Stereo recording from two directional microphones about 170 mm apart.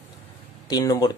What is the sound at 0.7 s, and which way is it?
Speech, 25° left (ahead or behind).